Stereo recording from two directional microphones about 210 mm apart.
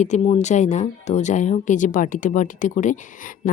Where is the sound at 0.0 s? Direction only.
35° left (ahead or behind).